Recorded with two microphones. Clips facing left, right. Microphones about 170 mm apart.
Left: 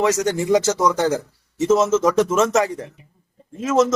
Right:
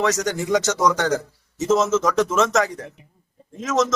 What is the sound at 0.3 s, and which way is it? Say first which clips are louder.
Speech: left 3 dB; 30° left (ahead or behind).